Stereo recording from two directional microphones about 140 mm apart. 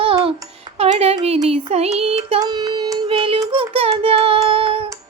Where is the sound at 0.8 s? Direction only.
50° right (ahead or behind).